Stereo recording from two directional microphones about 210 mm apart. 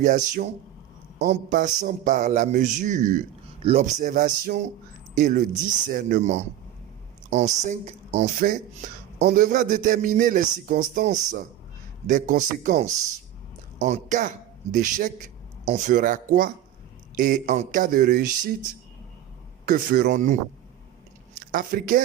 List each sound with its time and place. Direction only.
0.0 s a man's voice: 40° right (ahead or behind)
9.1 s a man's voice: 50° right (ahead or behind)
9.4 s a man's voice: 40° right (ahead or behind)
19.6 s a man's voice: 40° right (ahead or behind)
21.5 s a man's voice: 40° right (ahead or behind)